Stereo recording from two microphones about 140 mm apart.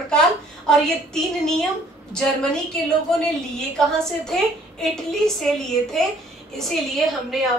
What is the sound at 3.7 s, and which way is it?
A woman's voice, 5° left (ahead or behind).